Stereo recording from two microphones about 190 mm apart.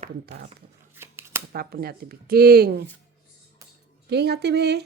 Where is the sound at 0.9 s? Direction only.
15° right (ahead or behind).